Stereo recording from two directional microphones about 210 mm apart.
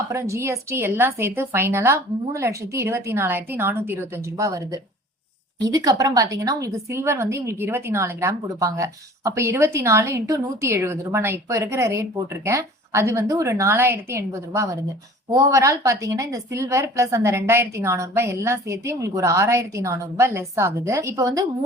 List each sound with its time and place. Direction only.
0.1 s a woman's voice: 15° right (ahead or behind)